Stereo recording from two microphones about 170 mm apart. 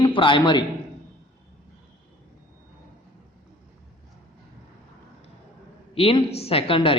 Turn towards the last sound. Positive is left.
turn(degrees=30)  # may be behind; listen again after turning